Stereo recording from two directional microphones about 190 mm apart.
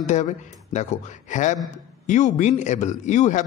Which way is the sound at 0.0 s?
40° left (ahead or behind).